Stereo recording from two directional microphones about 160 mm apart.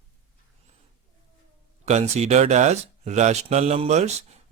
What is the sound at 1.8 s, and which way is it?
Speech, 45° right (ahead or behind).